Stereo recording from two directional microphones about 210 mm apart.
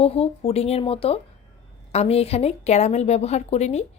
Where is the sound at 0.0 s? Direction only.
30° left (ahead or behind).